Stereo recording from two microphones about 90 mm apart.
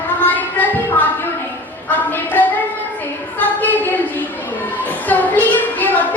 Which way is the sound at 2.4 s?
20° left (ahead or behind).